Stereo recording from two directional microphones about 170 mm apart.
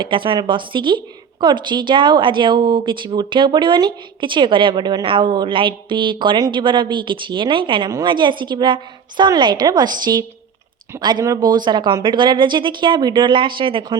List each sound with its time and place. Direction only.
0.0 s a woman's voice: 30° right (ahead or behind)